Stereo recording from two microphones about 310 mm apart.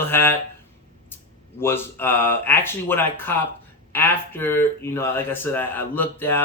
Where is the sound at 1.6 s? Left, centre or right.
Centre.